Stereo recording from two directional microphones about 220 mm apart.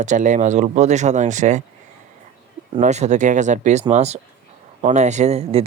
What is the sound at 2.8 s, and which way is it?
Speech, 30° right (ahead or behind).